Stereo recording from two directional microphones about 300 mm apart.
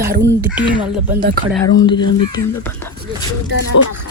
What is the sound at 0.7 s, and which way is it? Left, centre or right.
Speech, centre.